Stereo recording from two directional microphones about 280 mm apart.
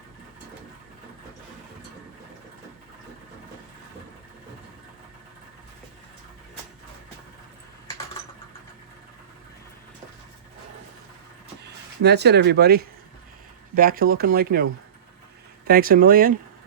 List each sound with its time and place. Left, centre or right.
11.6 s speech: right
15.6 s speech: right